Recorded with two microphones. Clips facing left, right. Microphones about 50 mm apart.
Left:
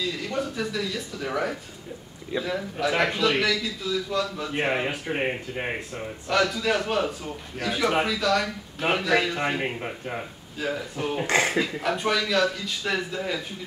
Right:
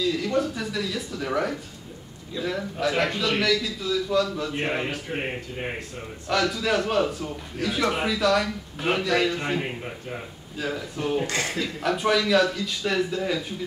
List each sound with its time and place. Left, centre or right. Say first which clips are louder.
0.0 s a man's voice: right 4 dB; centre
4.5 s speech: left 2 dB; left
6.2 s a man's voice: left 1 dB; centre
8.8 s a man's voice: even; centre
10.6 s a man's voice: even; centre
11.2 s speech: left 5 dB; left
11.8 s a man's voice: right 2 dB; centre